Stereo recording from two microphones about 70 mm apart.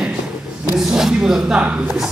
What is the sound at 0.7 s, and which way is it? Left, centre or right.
Speech, centre.